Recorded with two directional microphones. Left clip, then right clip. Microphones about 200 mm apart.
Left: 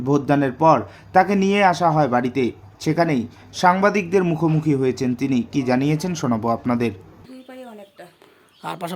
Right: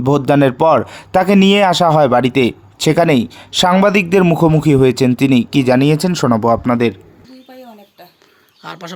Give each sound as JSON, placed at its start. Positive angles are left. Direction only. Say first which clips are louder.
{"t": 0.0, "sound": "speech", "louder": "right 7 dB", "side_deg": -45}
{"t": 4.6, "sound": "speech", "louder": "right 9 dB", "side_deg": -45}
{"t": 8.6, "sound": "speech", "louder": "left 1 dB", "side_deg": 5}